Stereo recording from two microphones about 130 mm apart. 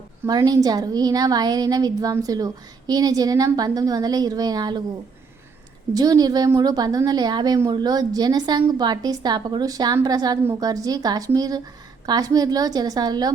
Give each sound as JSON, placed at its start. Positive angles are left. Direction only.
{"t": 0.3, "sound": "a woman's voice", "side_deg": -30}
{"t": 5.9, "sound": "a woman's voice", "side_deg": -30}